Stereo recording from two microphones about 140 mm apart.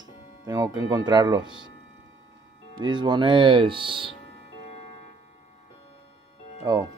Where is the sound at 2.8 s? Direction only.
35° right (ahead or behind).